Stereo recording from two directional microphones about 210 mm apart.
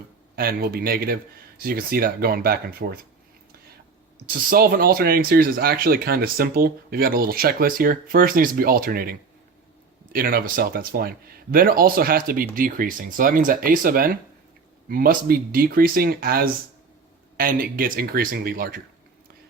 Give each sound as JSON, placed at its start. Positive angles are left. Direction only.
{"t": 0.3, "sound": "speech", "side_deg": -45}
{"t": 4.4, "sound": "speech", "side_deg": -45}